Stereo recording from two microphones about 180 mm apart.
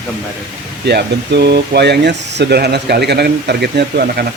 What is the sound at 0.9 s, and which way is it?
Speech, 65° right (ahead or behind).